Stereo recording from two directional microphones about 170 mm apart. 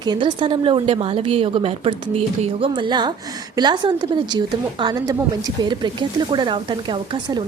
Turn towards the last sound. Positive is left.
turn(degrees=-25)  # may be behind; listen again after turning